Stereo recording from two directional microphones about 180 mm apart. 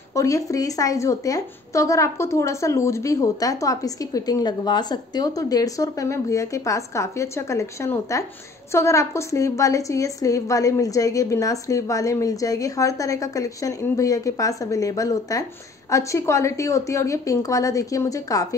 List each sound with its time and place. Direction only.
0.1 s a woman's voice: 15° left (ahead or behind)